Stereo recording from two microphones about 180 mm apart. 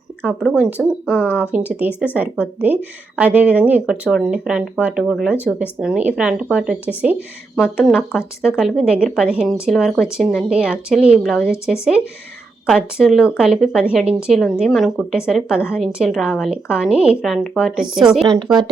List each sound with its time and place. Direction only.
0.3 s speech: 5° right (ahead or behind)
1.1 s speech: 10° left (ahead or behind)
1.5 s speech: 10° right (ahead or behind)
3.2 s speech: 10° right (ahead or behind)
18.3 s speech: 25° right (ahead or behind)